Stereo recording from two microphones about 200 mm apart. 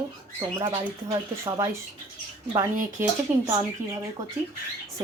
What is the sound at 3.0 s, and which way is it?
Speech, 10° right (ahead or behind).